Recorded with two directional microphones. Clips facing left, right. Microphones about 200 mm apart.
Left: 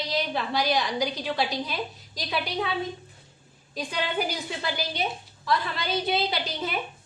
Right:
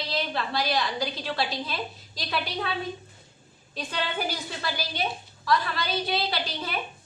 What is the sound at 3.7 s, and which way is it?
A woman's voice, 15° left (ahead or behind).